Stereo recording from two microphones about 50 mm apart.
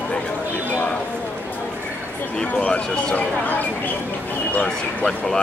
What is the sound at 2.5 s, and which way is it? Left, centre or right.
Speech, left.